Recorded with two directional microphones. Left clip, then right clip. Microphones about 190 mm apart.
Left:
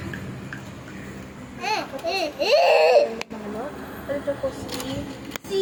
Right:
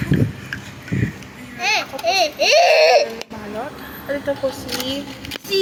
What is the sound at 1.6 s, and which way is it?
Speech, 35° left (ahead or behind).